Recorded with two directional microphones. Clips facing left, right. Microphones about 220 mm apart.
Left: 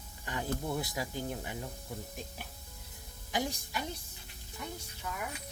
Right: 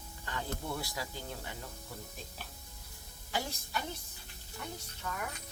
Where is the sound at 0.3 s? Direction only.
15° left (ahead or behind).